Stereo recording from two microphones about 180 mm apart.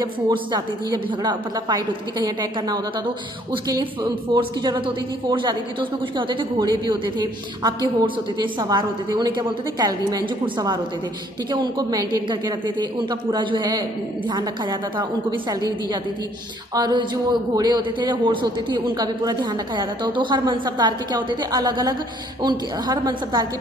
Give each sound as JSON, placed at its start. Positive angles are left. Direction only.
{"t": 0.3, "sound": "a man's voice", "side_deg": -25}
{"t": 16.7, "sound": "a man's voice", "side_deg": -25}